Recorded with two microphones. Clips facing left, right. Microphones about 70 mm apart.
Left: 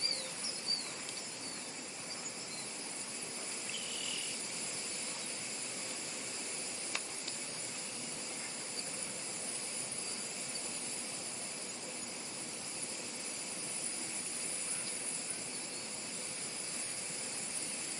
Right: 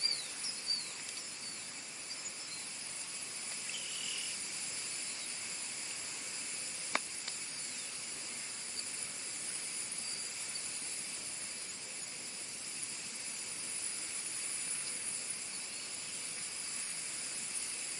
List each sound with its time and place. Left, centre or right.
6.9 s insect: right